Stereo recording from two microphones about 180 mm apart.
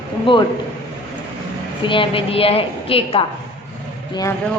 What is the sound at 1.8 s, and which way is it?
A woman's voice, 30° left (ahead or behind).